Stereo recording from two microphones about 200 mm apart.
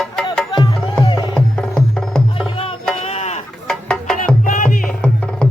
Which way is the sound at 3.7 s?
5° left (ahead or behind).